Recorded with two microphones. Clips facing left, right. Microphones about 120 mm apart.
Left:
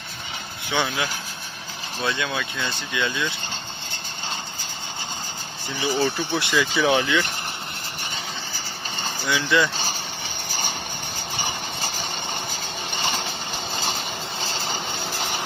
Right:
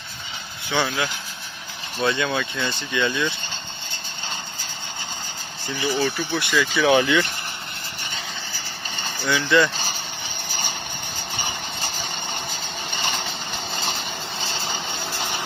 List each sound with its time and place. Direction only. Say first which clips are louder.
0.7 s speech: right 1 dB; 15° left (ahead or behind)
2.0 s speech: right 4 dB; centre (ahead or behind)
5.8 s speech: even; 15° left (ahead or behind)
6.9 s speech: right 3 dB; centre (ahead or behind)
9.2 s speech: right 3 dB; 10° left (ahead or behind)